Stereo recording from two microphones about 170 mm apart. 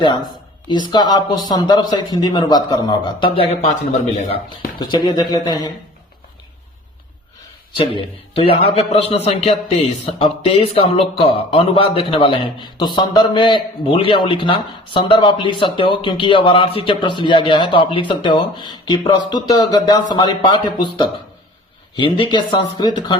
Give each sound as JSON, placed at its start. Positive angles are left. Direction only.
{"t": 0.7, "sound": "a man's voice", "side_deg": 25}
{"t": 4.8, "sound": "a man's voice", "side_deg": 25}
{"t": 7.8, "sound": "a man's voice", "side_deg": 30}